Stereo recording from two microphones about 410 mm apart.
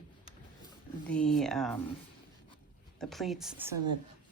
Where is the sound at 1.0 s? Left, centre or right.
Centre.